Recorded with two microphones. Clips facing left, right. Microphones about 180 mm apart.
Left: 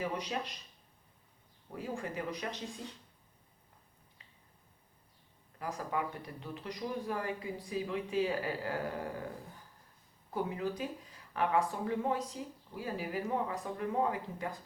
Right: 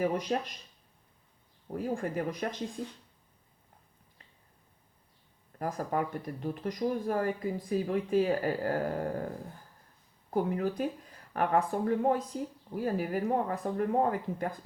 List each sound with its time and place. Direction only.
0.0 s speech: 50° right (ahead or behind)
1.6 s speech: 45° right (ahead or behind)
5.5 s speech: 45° right (ahead or behind)
10.3 s speech: 50° right (ahead or behind)